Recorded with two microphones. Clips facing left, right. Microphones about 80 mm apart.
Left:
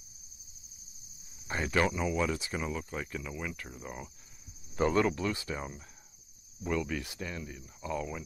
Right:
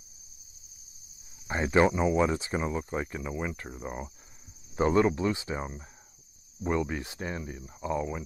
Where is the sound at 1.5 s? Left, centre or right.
Right.